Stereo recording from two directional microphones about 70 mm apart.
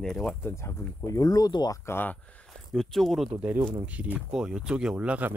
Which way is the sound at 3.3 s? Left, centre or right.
Right.